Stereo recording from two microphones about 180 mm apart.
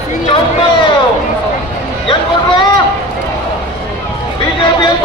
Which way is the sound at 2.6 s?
25° left (ahead or behind).